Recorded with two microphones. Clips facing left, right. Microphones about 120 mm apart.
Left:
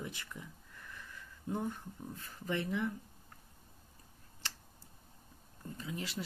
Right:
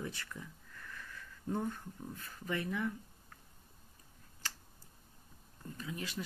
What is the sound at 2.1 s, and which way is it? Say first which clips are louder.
Speech: left 2 dB; 30° left (ahead or behind).